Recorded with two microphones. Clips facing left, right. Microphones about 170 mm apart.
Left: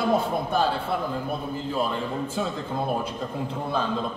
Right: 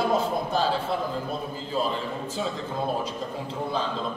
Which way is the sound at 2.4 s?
60° left (ahead or behind).